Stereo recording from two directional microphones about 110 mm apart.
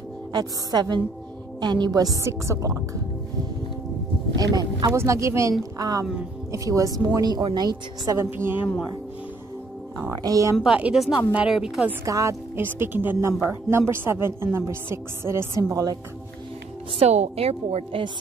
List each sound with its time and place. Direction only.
0.3 s speech: 35° right (ahead or behind)
4.4 s speech: 35° right (ahead or behind)
8.3 s speech: 20° right (ahead or behind)
9.9 s speech: 30° right (ahead or behind)
10.6 s speech: 10° right (ahead or behind)
12.0 s speech: 30° right (ahead or behind)
15.7 s speech: 35° right (ahead or behind)
17.0 s a woman's voice: 80° right